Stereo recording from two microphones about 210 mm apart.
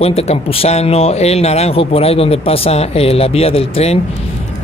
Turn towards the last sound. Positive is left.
turn(degrees=30)  # may be behind; listen again after turning